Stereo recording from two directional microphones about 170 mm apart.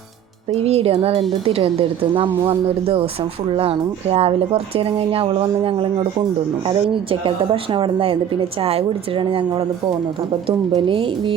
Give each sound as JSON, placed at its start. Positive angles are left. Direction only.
{"t": 0.5, "sound": "a woman's voice", "side_deg": -40}